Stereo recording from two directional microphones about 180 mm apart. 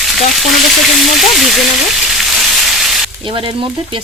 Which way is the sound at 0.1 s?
Centre (ahead or behind).